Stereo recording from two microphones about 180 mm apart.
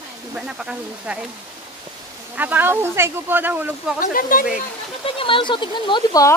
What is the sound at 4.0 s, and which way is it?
Speech, 50° left (ahead or behind).